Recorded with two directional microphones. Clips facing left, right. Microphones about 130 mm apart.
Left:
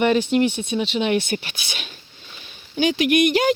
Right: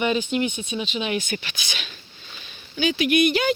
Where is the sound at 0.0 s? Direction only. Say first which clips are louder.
Left 5 dB; 55° left (ahead or behind).